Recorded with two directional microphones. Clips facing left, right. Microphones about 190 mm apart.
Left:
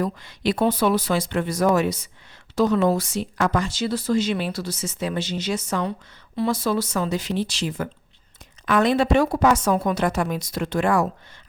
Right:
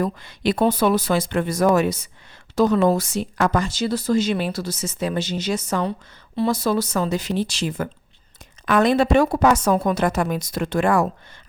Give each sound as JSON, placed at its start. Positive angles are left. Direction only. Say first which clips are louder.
{"t": 0.0, "sound": "a woman's voice", "louder": "right 2 dB", "side_deg": -50}